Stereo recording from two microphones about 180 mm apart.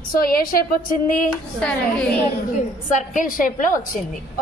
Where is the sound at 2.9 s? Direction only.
45° left (ahead or behind).